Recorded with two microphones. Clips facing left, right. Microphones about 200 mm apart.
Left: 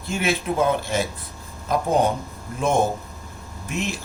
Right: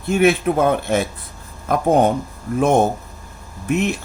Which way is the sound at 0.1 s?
55° right (ahead or behind).